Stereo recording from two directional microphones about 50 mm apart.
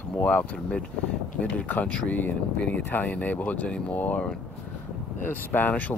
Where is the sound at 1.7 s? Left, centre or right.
Left.